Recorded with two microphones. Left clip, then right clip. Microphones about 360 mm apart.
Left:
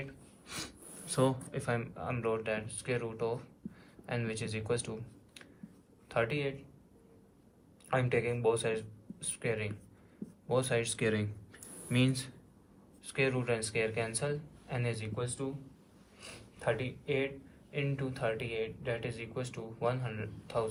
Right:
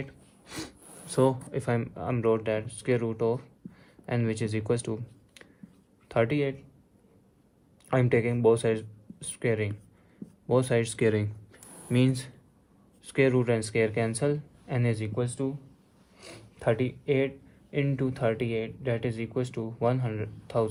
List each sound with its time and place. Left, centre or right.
0.0 s speech: right
7.9 s speech: right